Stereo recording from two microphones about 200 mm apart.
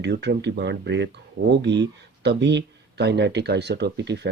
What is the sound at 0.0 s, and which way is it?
Speech, 60° right (ahead or behind).